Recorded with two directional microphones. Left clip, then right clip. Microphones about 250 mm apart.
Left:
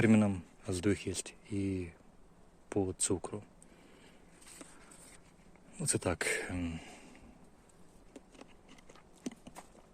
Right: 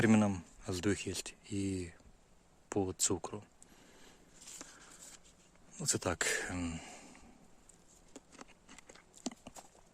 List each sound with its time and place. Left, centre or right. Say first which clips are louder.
0.0 s speech: left 1 dB; centre
4.6 s a sound: even; centre
5.7 s speech: left 1 dB; centre
8.1 s clip-clop: even; centre